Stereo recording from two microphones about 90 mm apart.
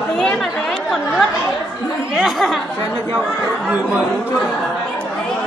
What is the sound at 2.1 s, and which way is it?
Speech, centre (ahead or behind).